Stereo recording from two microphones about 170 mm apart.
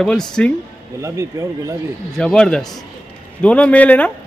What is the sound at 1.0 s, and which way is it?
Speech, 15° right (ahead or behind).